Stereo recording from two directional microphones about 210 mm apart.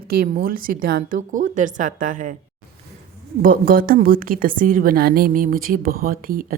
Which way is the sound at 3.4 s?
40° right (ahead or behind).